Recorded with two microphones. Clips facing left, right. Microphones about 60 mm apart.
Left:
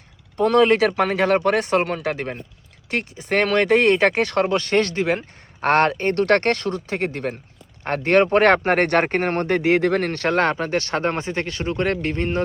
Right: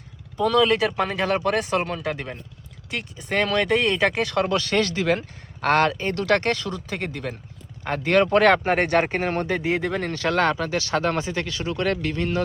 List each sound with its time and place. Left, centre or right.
0.3 s speech: left
2.9 s speech: left
4.5 s speech: left
5.0 s speech: left
5.6 s speech: left